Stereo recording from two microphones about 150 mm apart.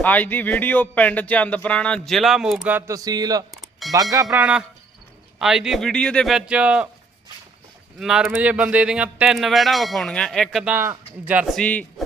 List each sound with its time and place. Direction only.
0.0 s speech: 10° left (ahead or behind); by 3.4 s 25° right (ahead or behind)
3.5 s music: centre (ahead or behind)
4.1 s speech: 20° right (ahead or behind)
4.4 s speech: 5° right (ahead or behind)
7.9 s speech: 5° right (ahead or behind)
11.5 s speech: 10° left (ahead or behind)